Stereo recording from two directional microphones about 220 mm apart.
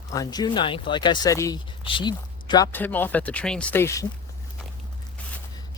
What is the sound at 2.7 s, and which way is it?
Speech, 10° left (ahead or behind).